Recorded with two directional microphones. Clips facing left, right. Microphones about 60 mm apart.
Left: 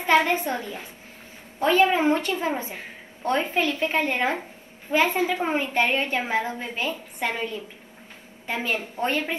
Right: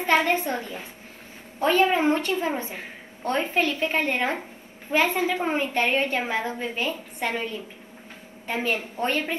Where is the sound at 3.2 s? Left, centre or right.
Left.